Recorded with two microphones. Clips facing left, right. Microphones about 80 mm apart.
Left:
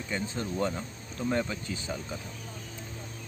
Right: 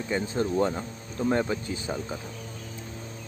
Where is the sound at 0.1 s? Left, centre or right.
Right.